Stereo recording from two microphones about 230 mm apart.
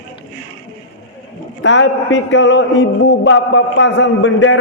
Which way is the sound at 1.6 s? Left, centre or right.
Left.